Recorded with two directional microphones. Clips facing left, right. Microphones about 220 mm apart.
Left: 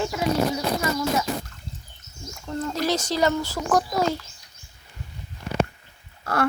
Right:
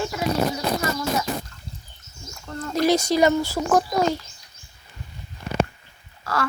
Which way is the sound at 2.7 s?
10° right (ahead or behind).